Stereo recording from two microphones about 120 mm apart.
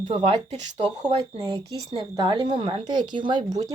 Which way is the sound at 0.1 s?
50° right (ahead or behind).